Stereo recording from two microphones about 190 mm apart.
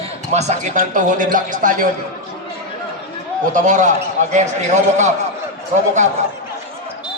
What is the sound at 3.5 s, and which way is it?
A man's voice, 40° right (ahead or behind).